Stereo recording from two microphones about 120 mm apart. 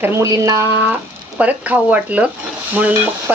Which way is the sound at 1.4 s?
10° right (ahead or behind).